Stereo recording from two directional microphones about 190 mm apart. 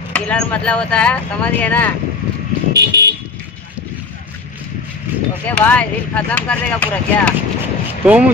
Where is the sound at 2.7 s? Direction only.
60° right (ahead or behind).